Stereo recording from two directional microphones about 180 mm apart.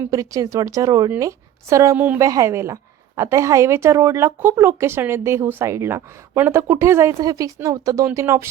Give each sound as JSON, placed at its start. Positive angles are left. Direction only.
{"t": 0.0, "sound": "speech", "side_deg": -15}